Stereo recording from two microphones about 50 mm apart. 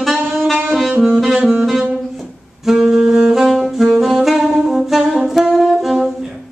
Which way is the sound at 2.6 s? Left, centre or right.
Centre.